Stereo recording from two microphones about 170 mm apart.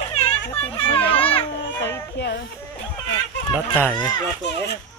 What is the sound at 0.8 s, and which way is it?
Children playing, 35° left (ahead or behind).